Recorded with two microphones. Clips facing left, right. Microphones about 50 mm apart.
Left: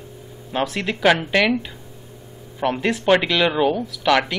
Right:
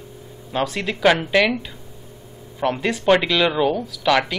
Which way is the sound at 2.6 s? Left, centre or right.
Centre.